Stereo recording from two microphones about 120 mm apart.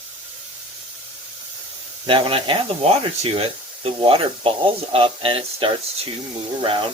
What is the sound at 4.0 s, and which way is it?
Speech, 50° right (ahead or behind).